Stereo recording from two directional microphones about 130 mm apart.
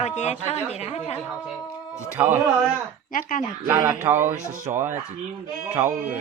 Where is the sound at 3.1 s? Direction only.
90° left.